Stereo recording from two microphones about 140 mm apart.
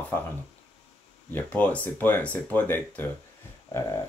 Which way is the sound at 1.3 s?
10° left (ahead or behind).